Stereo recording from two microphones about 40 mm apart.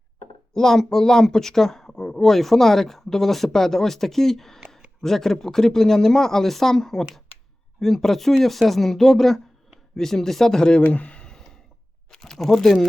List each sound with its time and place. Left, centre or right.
0.5 s speech: centre
10.8 s speech: left
12.1 s speech: centre